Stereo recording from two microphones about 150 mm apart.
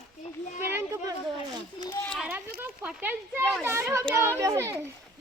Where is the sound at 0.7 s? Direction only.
20° right (ahead or behind).